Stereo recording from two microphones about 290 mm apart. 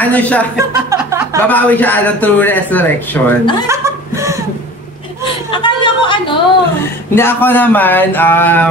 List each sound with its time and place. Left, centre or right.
0.0 s a man's voice: centre
0.6 s a sound: centre
1.5 s a man's voice: centre
3.6 s chuckle: centre
5.5 s a sound: centre
7.2 s speech: centre